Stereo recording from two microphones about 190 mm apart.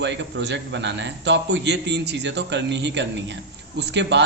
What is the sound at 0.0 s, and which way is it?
A man's voice, 65° right (ahead or behind).